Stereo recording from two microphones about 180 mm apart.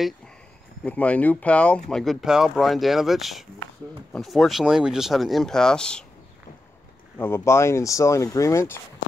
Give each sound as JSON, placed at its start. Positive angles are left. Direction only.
{"t": 0.8, "sound": "speech", "side_deg": 10}
{"t": 7.2, "sound": "speech", "side_deg": 15}